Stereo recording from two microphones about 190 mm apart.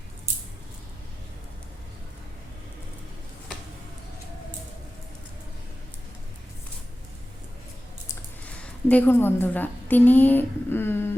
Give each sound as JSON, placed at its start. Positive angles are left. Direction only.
{"t": 8.0, "sound": "speech", "side_deg": 10}